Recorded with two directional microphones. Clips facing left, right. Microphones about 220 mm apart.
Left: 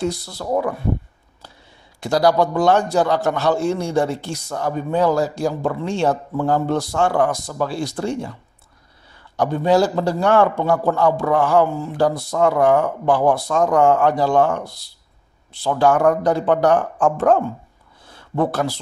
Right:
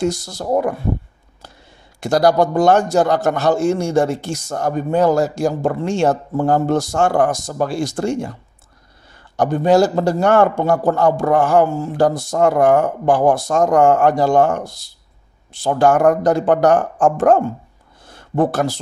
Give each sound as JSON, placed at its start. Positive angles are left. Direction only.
{"t": 0.2, "sound": "a man's voice", "side_deg": -45}
{"t": 2.0, "sound": "a man's voice", "side_deg": -45}
{"t": 9.4, "sound": "a man's voice", "side_deg": -45}
{"t": 18.0, "sound": "a sound", "side_deg": -45}